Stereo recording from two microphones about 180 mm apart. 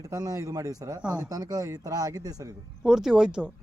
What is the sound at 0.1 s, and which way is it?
Speech, 20° right (ahead or behind).